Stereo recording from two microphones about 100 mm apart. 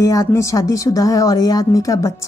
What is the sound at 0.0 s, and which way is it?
Speech, 35° left (ahead or behind).